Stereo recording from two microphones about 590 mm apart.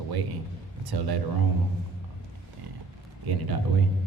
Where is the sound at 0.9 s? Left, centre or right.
Right.